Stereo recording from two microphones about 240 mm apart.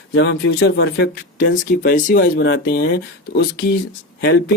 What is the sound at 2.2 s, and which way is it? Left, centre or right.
Speech, left.